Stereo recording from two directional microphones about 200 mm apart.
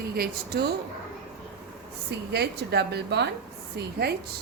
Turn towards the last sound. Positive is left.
turn(degrees=-55)  # may be behind; listen again after turning